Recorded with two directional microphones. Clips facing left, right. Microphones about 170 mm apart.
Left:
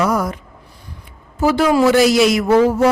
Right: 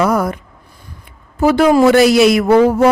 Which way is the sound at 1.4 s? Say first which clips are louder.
Right 4 dB; 55° right (ahead or behind).